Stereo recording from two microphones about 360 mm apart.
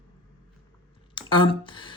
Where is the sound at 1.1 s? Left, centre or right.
Centre.